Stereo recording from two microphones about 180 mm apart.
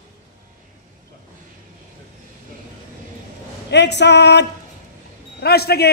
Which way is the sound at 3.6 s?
70° left (ahead or behind).